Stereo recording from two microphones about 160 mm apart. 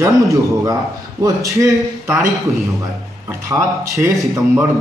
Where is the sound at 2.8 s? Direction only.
20° right (ahead or behind).